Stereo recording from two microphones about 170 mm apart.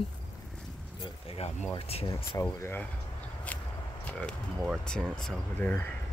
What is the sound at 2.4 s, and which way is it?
Speech, 15° left (ahead or behind).